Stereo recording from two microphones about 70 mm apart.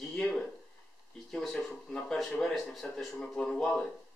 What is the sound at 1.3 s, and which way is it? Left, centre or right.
Speech, centre.